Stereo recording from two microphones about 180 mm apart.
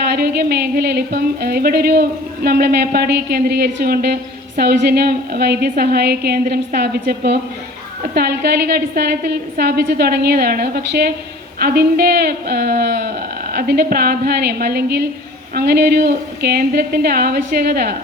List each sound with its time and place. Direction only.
0.0 s speech: 60° right (ahead or behind)